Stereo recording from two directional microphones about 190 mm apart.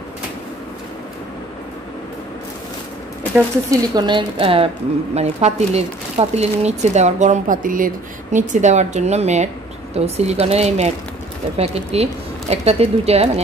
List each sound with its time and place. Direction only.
3.9 s a woman's voice: 25° right (ahead or behind)